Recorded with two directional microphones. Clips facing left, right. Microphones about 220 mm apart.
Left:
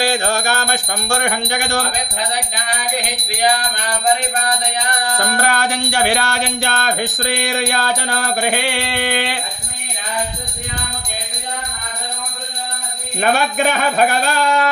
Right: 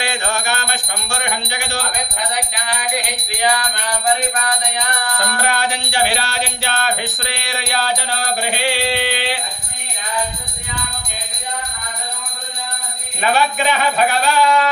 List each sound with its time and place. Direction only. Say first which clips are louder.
0.0 s bell: left 5 dB; 35° left (ahead or behind); by 1.8 s 50° left (ahead or behind)
5.4 s music: left 1 dB; 45° left (ahead or behind)
13.2 s music: left 1 dB; 50° left (ahead or behind)